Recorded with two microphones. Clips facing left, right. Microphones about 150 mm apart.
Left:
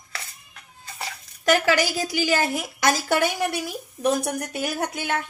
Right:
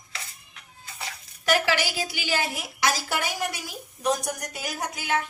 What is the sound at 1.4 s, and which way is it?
A woman's voice, 45° left (ahead or behind).